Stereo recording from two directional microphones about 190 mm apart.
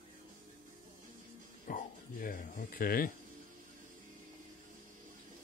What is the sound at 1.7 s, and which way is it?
Music, 45° left (ahead or behind).